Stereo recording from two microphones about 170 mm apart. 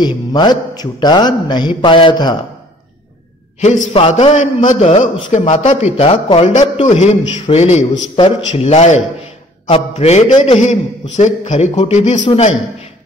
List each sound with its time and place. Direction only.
0.0 s a man's voice: 25° left (ahead or behind)
3.9 s a man's voice: 35° left (ahead or behind)
5.9 s a man's voice: 30° left (ahead or behind)